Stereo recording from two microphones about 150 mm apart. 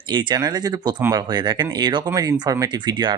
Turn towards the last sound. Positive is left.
turn(degrees=-30)  # may be behind; listen again after turning